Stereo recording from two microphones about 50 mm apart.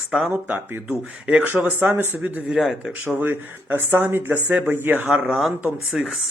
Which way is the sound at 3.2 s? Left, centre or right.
Right.